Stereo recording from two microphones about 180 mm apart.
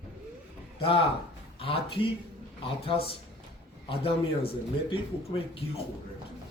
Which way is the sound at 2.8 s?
30° left (ahead or behind).